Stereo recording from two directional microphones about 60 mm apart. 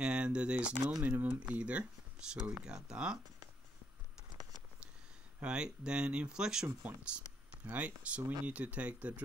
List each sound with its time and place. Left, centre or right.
0.0 s speech: centre
1.0 s speech: right; by 3.2 s centre
5.4 s speech: centre